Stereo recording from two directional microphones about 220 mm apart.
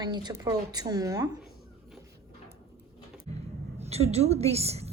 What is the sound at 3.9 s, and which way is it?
A woman's voice, 30° right (ahead or behind).